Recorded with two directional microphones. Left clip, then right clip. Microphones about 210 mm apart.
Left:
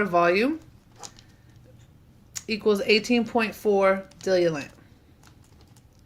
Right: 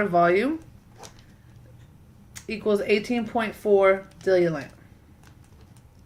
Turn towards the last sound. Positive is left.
turn(degrees=45)  # may be behind; listen again after turning